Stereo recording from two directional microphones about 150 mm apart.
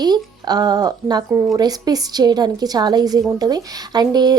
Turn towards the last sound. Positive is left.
turn(degrees=-25)  # may be behind; listen again after turning